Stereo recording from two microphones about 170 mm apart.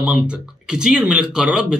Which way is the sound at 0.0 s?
5° right (ahead or behind).